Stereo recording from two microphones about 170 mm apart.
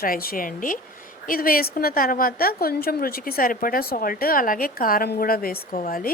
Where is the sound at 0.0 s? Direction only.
60° left (ahead or behind).